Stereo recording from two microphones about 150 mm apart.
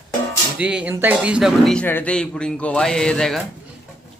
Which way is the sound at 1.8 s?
10° left (ahead or behind).